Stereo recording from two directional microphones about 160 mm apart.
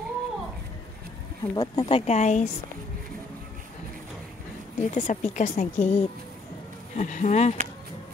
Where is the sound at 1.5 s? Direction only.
35° left (ahead or behind).